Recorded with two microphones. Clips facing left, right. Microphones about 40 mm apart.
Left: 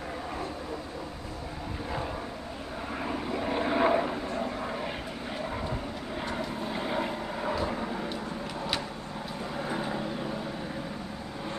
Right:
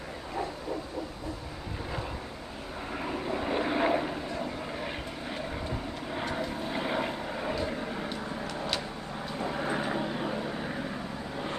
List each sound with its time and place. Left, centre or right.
3.0 s vehicle: centre
6.3 s vehicle: centre
9.4 s vehicle: centre